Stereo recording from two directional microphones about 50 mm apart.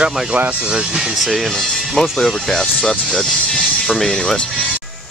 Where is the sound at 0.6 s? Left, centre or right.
Centre.